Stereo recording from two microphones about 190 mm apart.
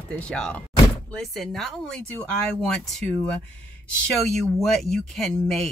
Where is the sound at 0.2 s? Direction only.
5° left (ahead or behind).